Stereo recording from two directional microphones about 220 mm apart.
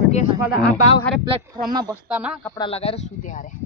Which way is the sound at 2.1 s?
5° right (ahead or behind).